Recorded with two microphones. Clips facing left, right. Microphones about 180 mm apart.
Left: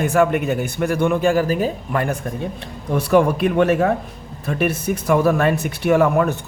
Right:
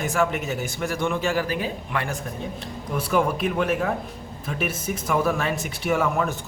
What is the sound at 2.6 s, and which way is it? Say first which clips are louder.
Speech: left 7 dB; 70° left (ahead or behind).